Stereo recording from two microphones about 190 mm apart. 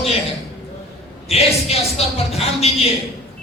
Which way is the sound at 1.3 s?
30° left (ahead or behind).